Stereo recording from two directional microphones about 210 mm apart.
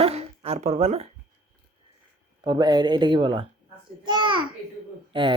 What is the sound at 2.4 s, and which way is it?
A child's voice, 20° right (ahead or behind).